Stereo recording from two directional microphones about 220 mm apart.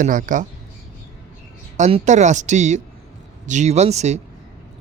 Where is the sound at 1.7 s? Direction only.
30° right (ahead or behind).